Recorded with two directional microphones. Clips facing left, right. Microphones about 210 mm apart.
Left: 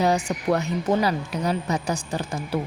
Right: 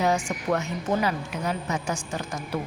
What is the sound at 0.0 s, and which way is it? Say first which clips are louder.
A woman's voice: left 3 dB; 35° left (ahead or behind).